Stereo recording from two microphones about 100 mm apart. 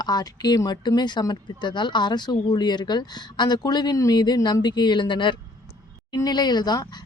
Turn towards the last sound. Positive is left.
turn(degrees=45)  # may be behind; listen again after turning